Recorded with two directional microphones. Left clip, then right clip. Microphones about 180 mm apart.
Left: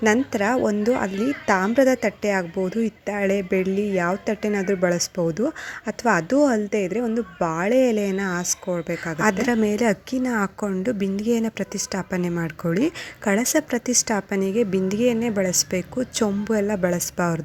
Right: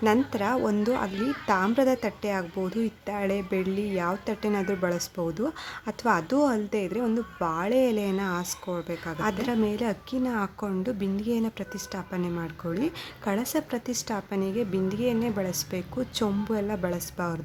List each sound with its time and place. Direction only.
0.0 s a woman's voice: 20° left (ahead or behind)